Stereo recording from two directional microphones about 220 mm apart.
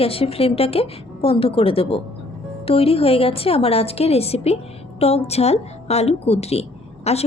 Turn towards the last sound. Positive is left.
turn(degrees=30)  # may be behind; listen again after turning